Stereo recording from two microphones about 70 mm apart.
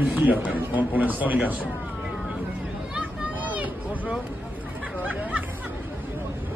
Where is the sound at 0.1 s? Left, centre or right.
Right.